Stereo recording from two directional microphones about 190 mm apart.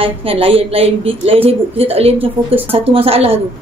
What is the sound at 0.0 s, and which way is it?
A woman's voice, 30° right (ahead or behind).